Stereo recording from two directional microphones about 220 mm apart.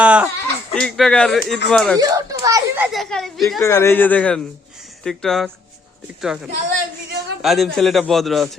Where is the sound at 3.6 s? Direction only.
10° left (ahead or behind).